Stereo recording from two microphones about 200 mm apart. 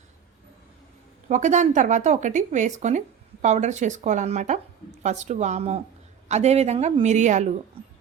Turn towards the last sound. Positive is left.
turn(degrees=-35)  # may be behind; listen again after turning